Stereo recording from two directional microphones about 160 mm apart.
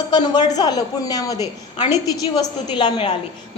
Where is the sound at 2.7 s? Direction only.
30° left (ahead or behind).